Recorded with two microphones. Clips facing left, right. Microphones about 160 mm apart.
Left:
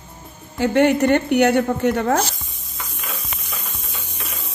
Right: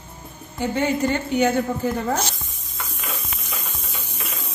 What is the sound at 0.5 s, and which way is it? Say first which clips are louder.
A woman's voice: left 6 dB; 80° left.